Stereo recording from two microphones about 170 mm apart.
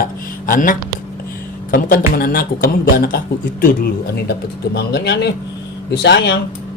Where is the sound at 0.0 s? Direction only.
55° left (ahead or behind).